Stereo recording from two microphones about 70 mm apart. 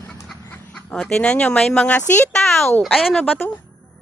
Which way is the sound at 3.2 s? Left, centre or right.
Left.